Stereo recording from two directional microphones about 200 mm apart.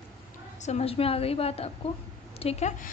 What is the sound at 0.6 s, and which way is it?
A woman's voice, 30° left (ahead or behind).